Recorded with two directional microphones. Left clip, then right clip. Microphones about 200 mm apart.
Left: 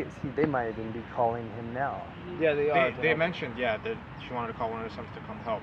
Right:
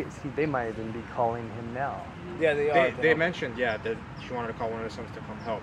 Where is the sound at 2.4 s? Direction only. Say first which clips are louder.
Right 2 dB; 35° left (ahead or behind).